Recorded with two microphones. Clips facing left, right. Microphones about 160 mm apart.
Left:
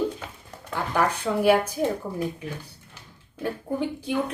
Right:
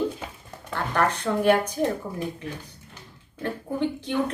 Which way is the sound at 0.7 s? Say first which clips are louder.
Even; 10° left (ahead or behind).